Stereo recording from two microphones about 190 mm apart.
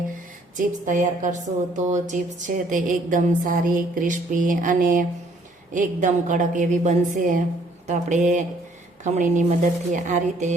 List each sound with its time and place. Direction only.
0.5 s a woman's voice: 40° right (ahead or behind)
2.6 s a sound: 45° right (ahead or behind)
7.9 s a woman's voice: 40° right (ahead or behind)